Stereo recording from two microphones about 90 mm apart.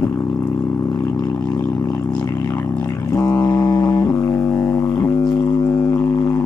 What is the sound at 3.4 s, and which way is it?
Synthesizer, 50° left (ahead or behind).